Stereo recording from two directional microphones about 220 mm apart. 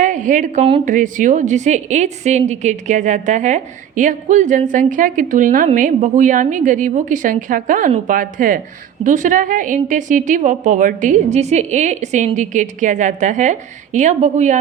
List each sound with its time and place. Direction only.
0.0 s a woman's voice: 35° right (ahead or behind)